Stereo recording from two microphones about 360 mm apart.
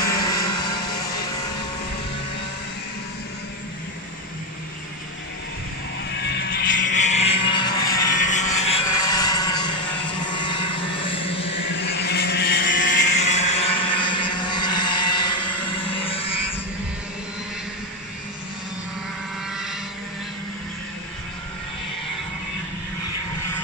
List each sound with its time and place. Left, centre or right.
6.1 s vehicle: left
11.7 s vehicle: left
13.3 s vehicle: centre